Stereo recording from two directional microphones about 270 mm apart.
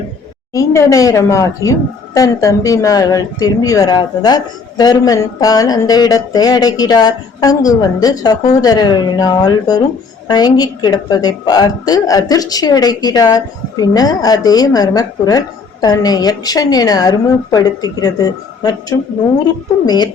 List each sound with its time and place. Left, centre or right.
0.5 s a woman's voice: centre